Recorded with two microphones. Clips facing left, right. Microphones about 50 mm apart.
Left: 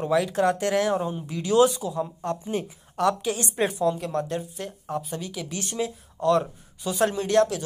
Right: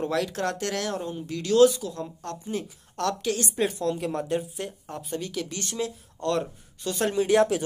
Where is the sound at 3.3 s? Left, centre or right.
Left.